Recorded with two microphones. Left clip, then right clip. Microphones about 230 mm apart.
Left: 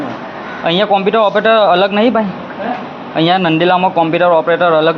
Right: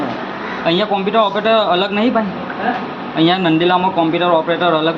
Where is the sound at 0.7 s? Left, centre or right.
Left.